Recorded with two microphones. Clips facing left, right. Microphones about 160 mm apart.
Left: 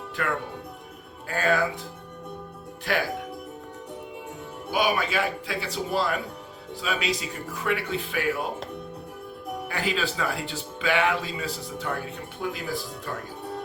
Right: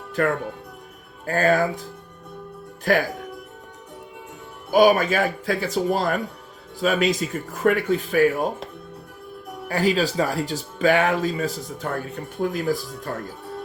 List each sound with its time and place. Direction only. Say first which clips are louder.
0.2 s speech: right 7 dB; 45° right (ahead or behind)
2.9 s speech: right 7 dB; 45° right (ahead or behind)
4.7 s speech: right 9 dB; 45° right (ahead or behind)
9.6 s speech: right 8 dB; 40° right (ahead or behind)